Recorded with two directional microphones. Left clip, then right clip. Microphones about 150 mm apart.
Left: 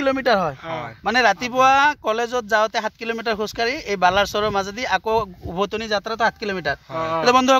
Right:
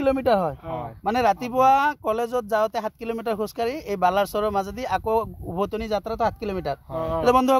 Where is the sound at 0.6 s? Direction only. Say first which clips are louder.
Left 3 dB; centre (ahead or behind).